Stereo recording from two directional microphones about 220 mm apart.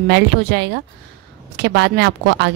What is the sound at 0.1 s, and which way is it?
Speech, 50° right (ahead or behind).